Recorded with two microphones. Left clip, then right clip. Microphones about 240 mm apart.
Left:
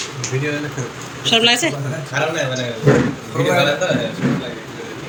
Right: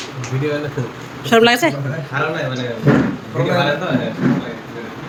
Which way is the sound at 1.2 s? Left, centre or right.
Centre.